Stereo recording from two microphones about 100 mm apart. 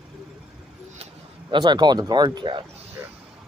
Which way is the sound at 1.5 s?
50° right (ahead or behind).